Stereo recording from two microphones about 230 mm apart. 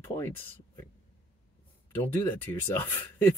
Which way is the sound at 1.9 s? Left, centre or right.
Centre.